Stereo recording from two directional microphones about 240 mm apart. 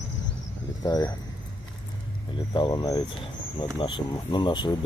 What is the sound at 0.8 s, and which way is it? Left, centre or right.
Speech, centre.